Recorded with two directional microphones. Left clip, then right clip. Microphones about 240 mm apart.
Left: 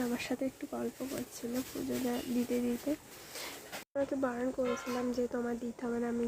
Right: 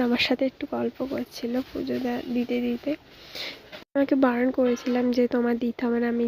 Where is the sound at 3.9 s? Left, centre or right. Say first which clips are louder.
Right 12 dB; right.